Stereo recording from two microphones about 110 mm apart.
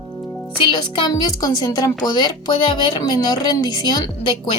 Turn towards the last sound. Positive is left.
turn(degrees=45)  # may be behind; listen again after turning